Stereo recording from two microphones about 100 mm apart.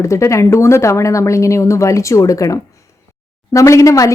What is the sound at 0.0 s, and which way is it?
A woman's voice, 30° left (ahead or behind).